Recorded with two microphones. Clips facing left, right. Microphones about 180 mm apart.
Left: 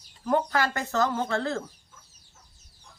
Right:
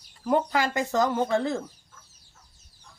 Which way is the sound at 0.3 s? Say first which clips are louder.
Right 1 dB; 15° right (ahead or behind).